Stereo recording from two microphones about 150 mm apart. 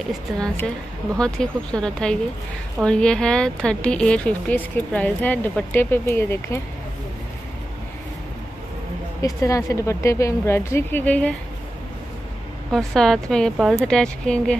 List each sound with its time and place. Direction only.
0.3 s speech: 5° right (ahead or behind); by 6.6 s 15° left (ahead or behind)
9.2 s speech: 20° left (ahead or behind)
12.7 s speech: centre (ahead or behind)